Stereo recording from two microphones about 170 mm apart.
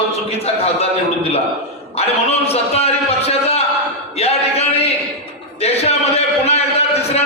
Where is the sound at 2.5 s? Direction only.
35° left (ahead or behind).